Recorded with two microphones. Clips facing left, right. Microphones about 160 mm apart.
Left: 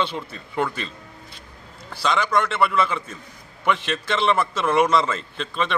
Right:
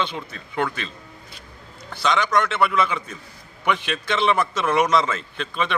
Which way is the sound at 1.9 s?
5° left (ahead or behind).